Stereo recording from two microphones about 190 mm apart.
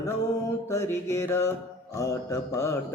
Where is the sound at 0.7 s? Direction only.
15° left (ahead or behind).